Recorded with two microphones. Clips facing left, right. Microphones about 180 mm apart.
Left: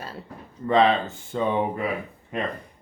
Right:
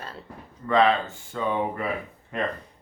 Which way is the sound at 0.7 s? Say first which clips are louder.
Left 1 dB; 25° left (ahead or behind).